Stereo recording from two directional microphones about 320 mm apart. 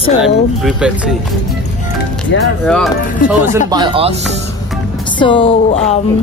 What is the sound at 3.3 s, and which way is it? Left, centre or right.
Speech, centre.